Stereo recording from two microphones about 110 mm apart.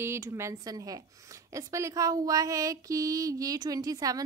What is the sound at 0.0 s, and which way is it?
Speech, 25° right (ahead or behind).